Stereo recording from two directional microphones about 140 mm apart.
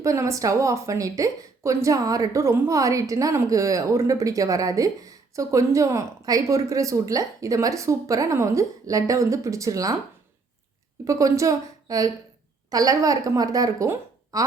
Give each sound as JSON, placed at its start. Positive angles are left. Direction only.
{"t": 0.0, "sound": "a woman's voice", "side_deg": -20}
{"t": 11.0, "sound": "a woman's voice", "side_deg": -25}